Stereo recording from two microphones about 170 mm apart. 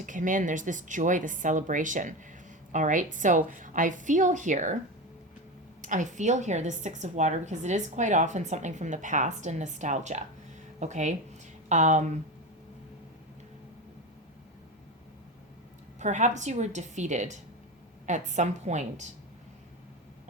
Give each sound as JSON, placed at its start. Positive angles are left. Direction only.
{"t": 0.0, "sound": "a woman's voice", "side_deg": -50}
{"t": 5.8, "sound": "a woman's voice", "side_deg": -50}
{"t": 16.0, "sound": "a woman's voice", "side_deg": -45}